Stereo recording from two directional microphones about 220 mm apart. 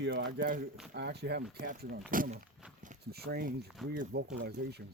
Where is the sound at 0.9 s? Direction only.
50° right (ahead or behind).